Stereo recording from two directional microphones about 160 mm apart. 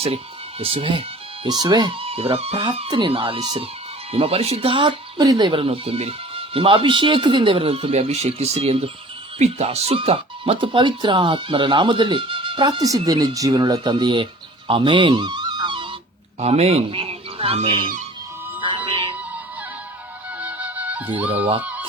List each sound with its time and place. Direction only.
0.6 s speech: 35° right (ahead or behind)
4.1 s speech: 35° right (ahead or behind)
14.7 s music: 30° right (ahead or behind)
16.4 s speech: 40° right (ahead or behind)
18.9 s music: 30° right (ahead or behind)
20.4 s music: 10° right (ahead or behind)
21.1 s speech: 35° right (ahead or behind)
21.6 s chicken: 10° right (ahead or behind)